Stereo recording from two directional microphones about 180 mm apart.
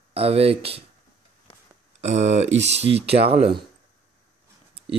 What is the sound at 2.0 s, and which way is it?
Speech, 40° right (ahead or behind).